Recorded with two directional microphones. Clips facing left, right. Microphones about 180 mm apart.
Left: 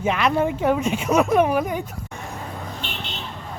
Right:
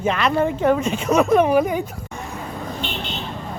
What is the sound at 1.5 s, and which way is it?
Speech, 5° right (ahead or behind).